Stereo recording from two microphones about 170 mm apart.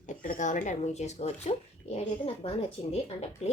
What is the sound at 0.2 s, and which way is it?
A woman's voice, 50° left (ahead or behind).